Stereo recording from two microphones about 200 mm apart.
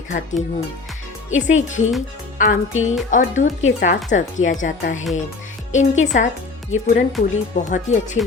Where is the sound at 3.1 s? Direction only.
40° left (ahead or behind).